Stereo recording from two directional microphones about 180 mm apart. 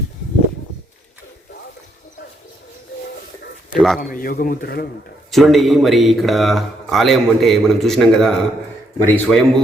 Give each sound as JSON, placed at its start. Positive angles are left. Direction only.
{"t": 3.8, "sound": "a man's voice", "side_deg": 5}
{"t": 4.1, "sound": "a man's voice", "side_deg": 50}
{"t": 5.3, "sound": "a man's voice", "side_deg": 0}